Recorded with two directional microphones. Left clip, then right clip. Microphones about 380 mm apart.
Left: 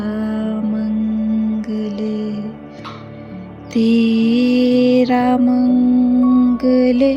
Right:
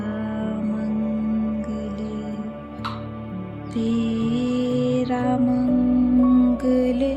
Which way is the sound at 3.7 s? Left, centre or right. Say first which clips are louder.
Left 9 dB; centre.